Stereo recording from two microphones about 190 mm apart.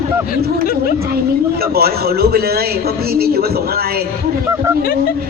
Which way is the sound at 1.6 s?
55° right (ahead or behind).